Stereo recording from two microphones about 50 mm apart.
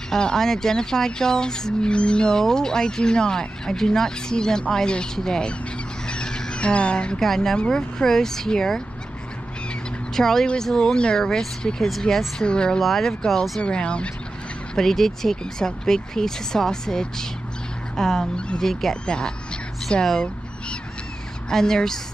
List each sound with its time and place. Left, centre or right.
0.1 s speech: centre
6.0 s bird: centre
7.2 s speech: centre
10.1 s speech: centre
12.8 s speech: centre
13.6 s speech: centre
14.8 s speech: centre
19.0 s speech: centre
21.5 s speech: centre